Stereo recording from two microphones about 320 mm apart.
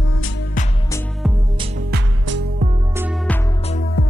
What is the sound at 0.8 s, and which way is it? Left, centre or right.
Music, centre.